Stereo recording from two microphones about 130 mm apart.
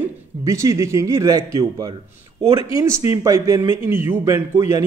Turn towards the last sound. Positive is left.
turn(degrees=-20)  # may be behind; listen again after turning